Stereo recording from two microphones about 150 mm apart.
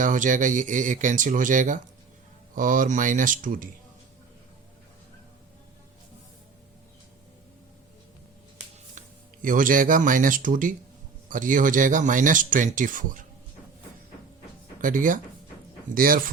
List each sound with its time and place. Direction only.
0.0 s speech: 60° right (ahead or behind)
9.0 s speech: 65° right (ahead or behind)
14.8 s speech: 60° right (ahead or behind)